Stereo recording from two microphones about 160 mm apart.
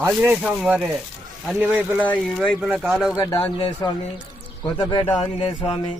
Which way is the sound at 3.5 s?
30° left (ahead or behind).